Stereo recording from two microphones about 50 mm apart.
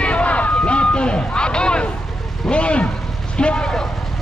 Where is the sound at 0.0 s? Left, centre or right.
Left.